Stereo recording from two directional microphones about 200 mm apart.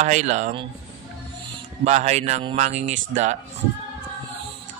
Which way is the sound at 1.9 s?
35° right (ahead or behind).